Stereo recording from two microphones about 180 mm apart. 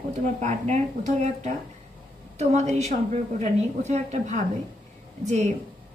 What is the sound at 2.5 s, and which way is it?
A woman's voice, 40° right (ahead or behind).